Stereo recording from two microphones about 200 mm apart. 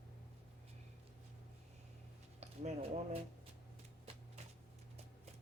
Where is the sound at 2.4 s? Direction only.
35° right (ahead or behind).